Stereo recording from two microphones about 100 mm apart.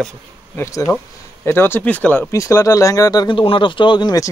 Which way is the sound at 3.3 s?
60° left (ahead or behind).